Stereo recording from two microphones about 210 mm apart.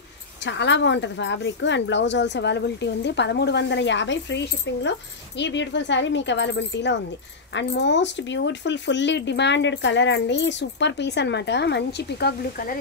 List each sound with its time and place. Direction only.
0.4 s speech: 55° left (ahead or behind)